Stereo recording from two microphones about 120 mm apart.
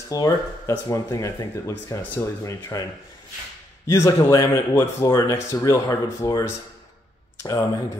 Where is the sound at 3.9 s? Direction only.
25° left (ahead or behind).